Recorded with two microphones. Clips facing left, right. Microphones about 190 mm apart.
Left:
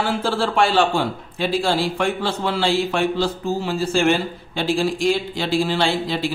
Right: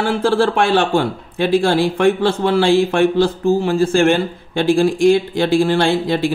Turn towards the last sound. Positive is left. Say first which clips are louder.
# right 5 dB
turn(degrees=-55)  # may be behind; listen again after turning